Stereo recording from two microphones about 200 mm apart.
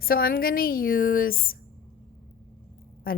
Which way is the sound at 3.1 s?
45° left (ahead or behind).